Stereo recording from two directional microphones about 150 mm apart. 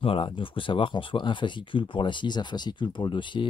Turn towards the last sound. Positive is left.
turn(degrees=30)  # may be behind; listen again after turning